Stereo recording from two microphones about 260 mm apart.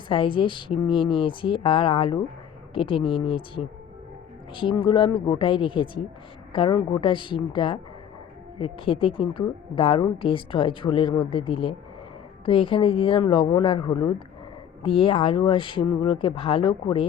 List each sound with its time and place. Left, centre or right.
0.1 s a woman's voice: centre